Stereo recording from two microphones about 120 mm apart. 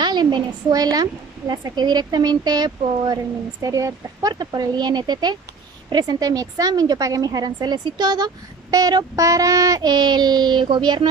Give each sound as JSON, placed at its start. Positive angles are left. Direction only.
{"t": 0.0, "sound": "a woman's voice", "side_deg": -35}